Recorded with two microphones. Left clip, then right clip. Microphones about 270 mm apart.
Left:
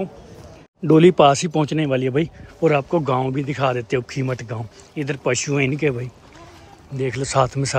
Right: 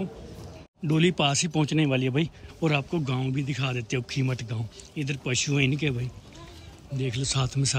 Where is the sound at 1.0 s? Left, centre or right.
Centre.